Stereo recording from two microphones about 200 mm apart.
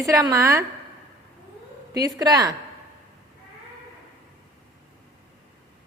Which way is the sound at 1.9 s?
20° right (ahead or behind).